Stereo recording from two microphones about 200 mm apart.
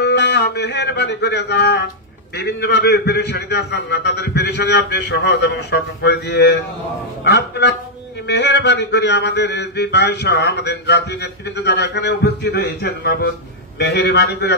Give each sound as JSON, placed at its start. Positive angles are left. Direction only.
{"t": 0.0, "sound": "a man's voice", "side_deg": 60}